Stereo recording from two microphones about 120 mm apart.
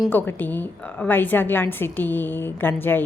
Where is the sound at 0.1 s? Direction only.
15° left (ahead or behind).